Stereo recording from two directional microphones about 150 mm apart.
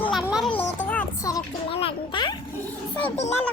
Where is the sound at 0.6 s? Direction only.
10° left (ahead or behind).